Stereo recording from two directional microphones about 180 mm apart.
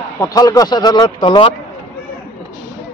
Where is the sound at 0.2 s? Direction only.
20° left (ahead or behind).